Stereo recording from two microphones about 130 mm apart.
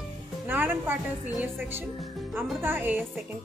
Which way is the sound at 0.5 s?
15° right (ahead or behind).